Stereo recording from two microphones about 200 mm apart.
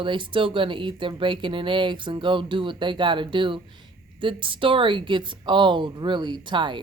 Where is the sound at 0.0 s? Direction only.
25° right (ahead or behind).